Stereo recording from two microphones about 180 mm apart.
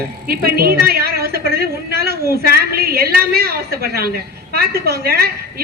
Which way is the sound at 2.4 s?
55° right (ahead or behind).